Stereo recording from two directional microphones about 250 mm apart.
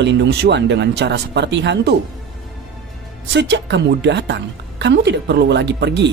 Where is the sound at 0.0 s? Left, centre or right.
Right.